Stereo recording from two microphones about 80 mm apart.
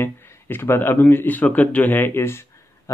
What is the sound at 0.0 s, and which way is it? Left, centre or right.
Speech, left.